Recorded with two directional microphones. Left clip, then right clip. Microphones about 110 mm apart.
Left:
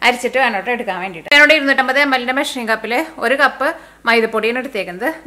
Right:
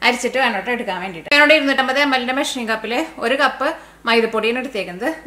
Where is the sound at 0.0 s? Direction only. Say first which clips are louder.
Left 2 dB; 25° left (ahead or behind).